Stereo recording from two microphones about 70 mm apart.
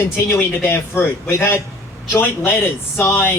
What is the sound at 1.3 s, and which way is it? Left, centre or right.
A man's voice, left.